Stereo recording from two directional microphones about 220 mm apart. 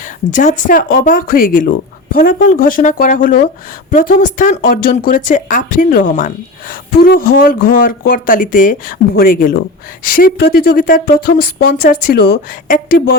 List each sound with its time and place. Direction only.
0.3 s speech: 35° left (ahead or behind)